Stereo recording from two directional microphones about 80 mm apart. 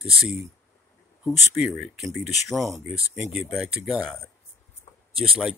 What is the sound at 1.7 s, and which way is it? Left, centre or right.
Speech, centre.